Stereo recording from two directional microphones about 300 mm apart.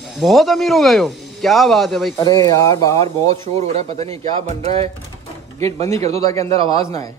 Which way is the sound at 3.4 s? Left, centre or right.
Right.